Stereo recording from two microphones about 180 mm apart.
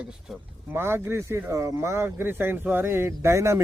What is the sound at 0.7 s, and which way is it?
Speech, 15° right (ahead or behind).